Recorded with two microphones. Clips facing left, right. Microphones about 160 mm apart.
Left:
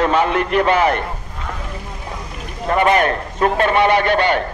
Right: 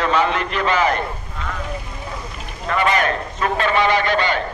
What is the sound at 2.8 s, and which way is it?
A man's voice, 55° left (ahead or behind).